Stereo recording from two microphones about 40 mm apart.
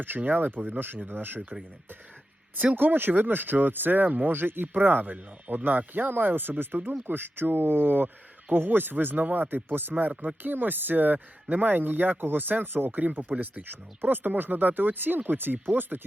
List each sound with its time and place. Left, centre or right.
0.3 s speech: right
2.7 s speech: right